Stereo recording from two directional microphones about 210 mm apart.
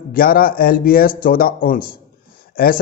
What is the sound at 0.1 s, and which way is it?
A man's voice, 45° left (ahead or behind).